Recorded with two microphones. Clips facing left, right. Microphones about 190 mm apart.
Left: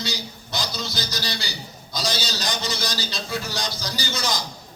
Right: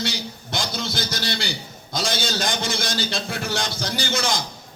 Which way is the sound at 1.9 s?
50° right (ahead or behind).